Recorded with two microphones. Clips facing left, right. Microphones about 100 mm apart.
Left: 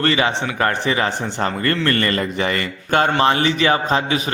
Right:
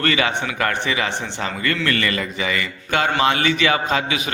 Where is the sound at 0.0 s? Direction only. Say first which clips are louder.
Left 2 dB; 30° left (ahead or behind).